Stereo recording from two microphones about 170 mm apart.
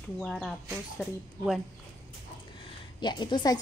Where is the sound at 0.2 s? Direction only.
Centre (ahead or behind).